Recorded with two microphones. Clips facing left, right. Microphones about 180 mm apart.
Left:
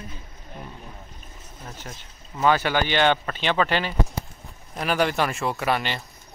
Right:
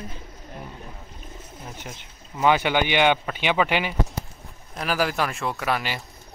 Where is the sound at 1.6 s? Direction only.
15° right (ahead or behind).